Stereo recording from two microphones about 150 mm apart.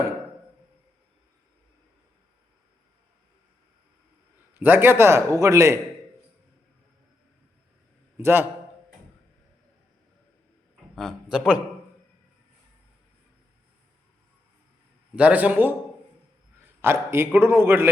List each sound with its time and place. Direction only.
4.5 s a man's voice: 15° right (ahead or behind)
8.2 s a man's voice: 15° right (ahead or behind)
10.9 s a man's voice: 5° right (ahead or behind)
15.1 s a man's voice: 10° right (ahead or behind)